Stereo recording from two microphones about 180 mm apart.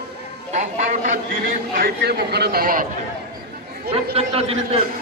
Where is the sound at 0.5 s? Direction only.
40° right (ahead or behind).